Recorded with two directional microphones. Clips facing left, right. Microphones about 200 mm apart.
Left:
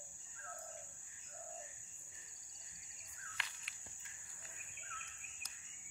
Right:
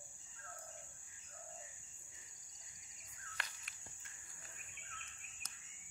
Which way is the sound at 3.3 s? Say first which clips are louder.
Right 2 dB; 45° right (ahead or behind).